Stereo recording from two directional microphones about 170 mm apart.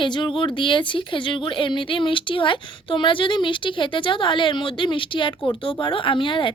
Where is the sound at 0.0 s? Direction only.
30° left (ahead or behind).